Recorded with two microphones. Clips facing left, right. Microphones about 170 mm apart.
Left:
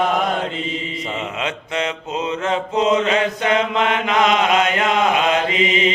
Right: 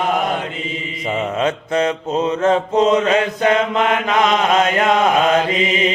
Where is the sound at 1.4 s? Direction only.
40° right (ahead or behind).